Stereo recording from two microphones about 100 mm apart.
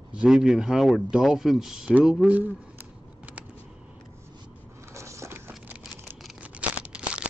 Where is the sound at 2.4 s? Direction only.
15° right (ahead or behind).